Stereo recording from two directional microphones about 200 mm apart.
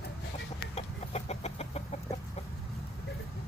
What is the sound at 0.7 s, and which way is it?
Chicken, 30° left (ahead or behind).